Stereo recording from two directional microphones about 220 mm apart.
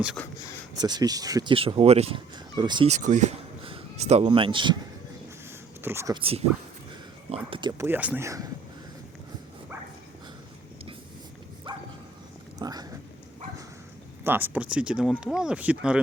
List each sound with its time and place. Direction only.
0.2 s speech: 5° left (ahead or behind)
0.8 s speech: 20° right (ahead or behind)
5.8 s speech: 10° right (ahead or behind)
6.1 s speech: 25° right (ahead or behind)
7.5 s speech: 20° right (ahead or behind)
7.9 s speech: 10° right (ahead or behind)
12.5 s a sound: 15° right (ahead or behind)
14.3 s speech: 10° right (ahead or behind)